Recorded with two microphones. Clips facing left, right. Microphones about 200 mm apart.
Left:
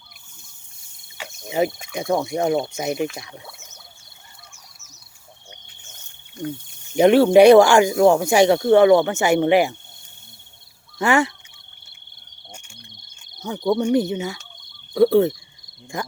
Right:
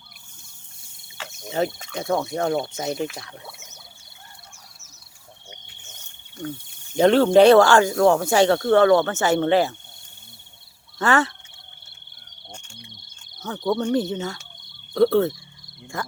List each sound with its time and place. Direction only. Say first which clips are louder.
1.2 s speech: left 3 dB; 10° left (ahead or behind)
6.9 s speech: left 2 dB; 15° left (ahead or behind)
10.9 s speech: left 2 dB; 10° left (ahead or behind)
12.5 s insect: right 1 dB; 10° left (ahead or behind)
13.3 s speech: left 3 dB; 15° left (ahead or behind)